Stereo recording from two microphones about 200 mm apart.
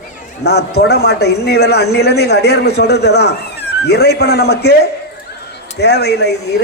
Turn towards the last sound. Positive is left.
turn(degrees=55)  # may be behind; listen again after turning